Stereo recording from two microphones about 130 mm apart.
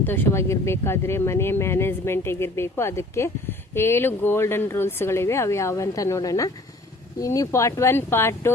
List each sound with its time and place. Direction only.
0.0 s speech: 15° left (ahead or behind)